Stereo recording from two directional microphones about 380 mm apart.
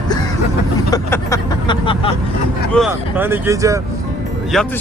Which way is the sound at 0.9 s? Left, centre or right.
Centre.